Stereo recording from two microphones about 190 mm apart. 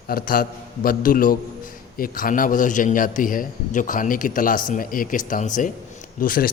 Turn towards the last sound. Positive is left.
turn(degrees=50)  # may be behind; listen again after turning